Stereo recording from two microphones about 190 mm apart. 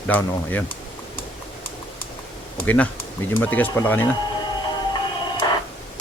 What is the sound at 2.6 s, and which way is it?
Speech, 10° left (ahead or behind).